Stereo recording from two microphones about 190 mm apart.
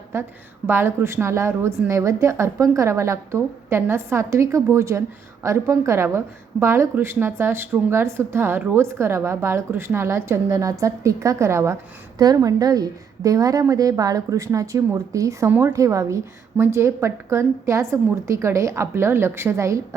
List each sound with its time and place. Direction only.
0.1 s a woman's voice: 15° right (ahead or behind)